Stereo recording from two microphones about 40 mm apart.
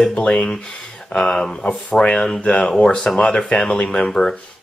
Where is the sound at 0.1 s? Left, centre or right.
Left.